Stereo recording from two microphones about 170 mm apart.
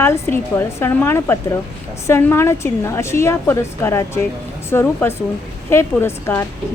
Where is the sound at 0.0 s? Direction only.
15° left (ahead or behind).